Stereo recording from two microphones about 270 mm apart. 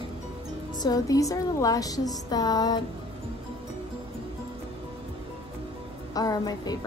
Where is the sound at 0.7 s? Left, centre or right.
Centre.